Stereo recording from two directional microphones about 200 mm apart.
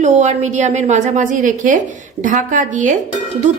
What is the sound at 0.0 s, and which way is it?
A woman's voice, 35° right (ahead or behind).